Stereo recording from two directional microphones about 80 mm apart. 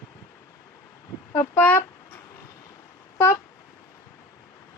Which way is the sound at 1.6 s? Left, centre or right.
Left.